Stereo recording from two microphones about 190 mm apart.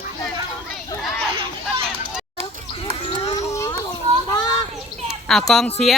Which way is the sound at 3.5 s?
15° left (ahead or behind).